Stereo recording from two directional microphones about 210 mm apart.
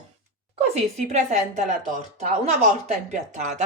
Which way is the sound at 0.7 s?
35° right (ahead or behind).